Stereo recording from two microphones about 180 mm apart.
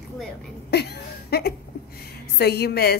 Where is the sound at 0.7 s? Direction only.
65° left (ahead or behind).